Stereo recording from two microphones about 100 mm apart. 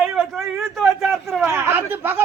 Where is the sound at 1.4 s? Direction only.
25° right (ahead or behind).